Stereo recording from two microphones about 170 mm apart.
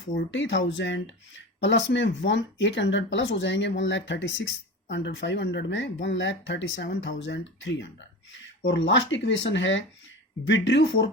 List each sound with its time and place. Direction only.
0.3 s speech: 90° left